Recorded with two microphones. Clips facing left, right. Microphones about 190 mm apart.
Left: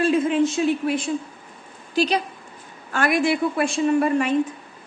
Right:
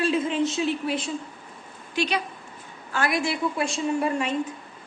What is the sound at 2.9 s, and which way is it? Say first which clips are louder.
A woman's voice: left 5 dB; 55° left (ahead or behind).